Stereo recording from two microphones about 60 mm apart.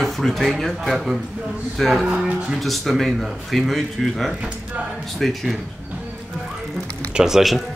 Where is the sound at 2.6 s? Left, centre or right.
Centre.